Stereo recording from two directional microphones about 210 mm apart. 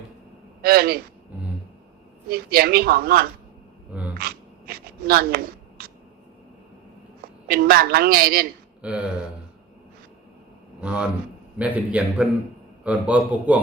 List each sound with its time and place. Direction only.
0.6 s a woman's voice: 45° right (ahead or behind)
2.3 s a woman's voice: 45° right (ahead or behind)
4.2 s zipper: 45° right (ahead or behind)
7.4 s a woman's voice: 45° right (ahead or behind)
8.8 s a sound: 5° right (ahead or behind)
10.8 s a man's voice: 5° right (ahead or behind)